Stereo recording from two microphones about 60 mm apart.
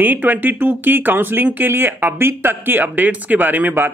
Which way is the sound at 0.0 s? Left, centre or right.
Right.